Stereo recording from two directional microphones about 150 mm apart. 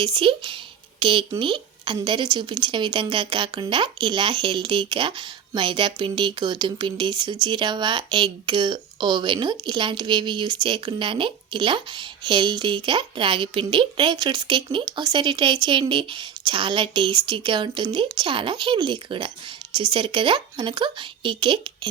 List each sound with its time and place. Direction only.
0.0 s a woman's voice: 35° right (ahead or behind)